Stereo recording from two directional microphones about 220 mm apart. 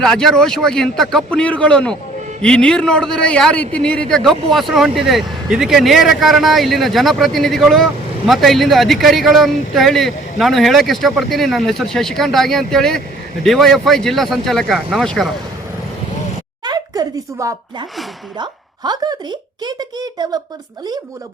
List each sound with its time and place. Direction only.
0.0 s speech: centre (ahead or behind)
16.6 s a woman's voice: 15° right (ahead or behind)